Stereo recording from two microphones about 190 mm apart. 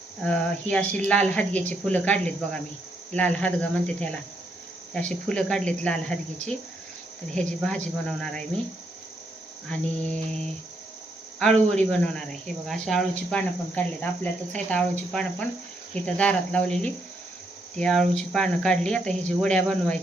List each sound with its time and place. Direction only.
0.3 s speech: 5° left (ahead or behind)
9.6 s speech: 5° left (ahead or behind)